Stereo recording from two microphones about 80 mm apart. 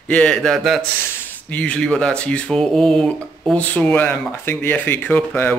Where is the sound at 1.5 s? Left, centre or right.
Centre.